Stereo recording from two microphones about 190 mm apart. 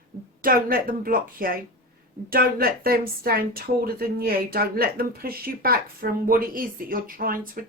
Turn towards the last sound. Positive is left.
turn(degrees=-50)  # may be behind; listen again after turning